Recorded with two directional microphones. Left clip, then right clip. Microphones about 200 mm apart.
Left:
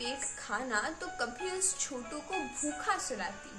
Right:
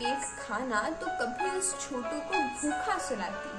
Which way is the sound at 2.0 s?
40° right (ahead or behind).